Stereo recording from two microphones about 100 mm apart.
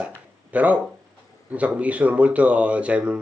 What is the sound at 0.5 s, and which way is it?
Speech, 15° right (ahead or behind).